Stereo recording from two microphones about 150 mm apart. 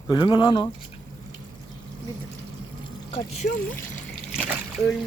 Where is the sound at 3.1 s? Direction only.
50° left (ahead or behind).